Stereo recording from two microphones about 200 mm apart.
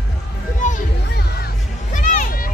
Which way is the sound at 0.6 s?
40° left (ahead or behind).